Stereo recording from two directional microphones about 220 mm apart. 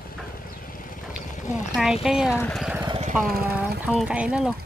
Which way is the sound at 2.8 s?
25° right (ahead or behind).